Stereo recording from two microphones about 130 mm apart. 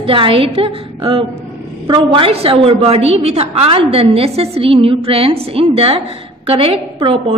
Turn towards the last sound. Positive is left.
turn(degrees=-45)  # may be behind; listen again after turning